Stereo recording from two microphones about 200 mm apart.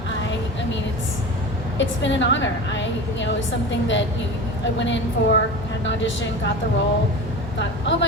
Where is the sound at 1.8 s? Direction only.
65° left (ahead or behind).